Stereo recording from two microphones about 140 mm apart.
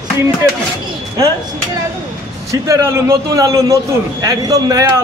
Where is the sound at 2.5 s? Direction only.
20° right (ahead or behind).